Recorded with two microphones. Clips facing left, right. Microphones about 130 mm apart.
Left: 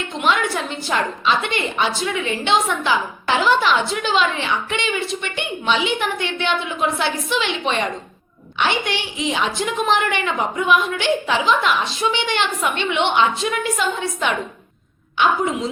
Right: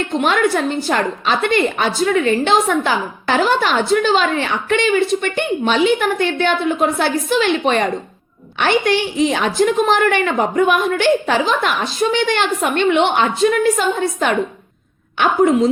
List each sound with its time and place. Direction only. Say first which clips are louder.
0.2 s a woman's voice: right 4 dB; 45° right (ahead or behind)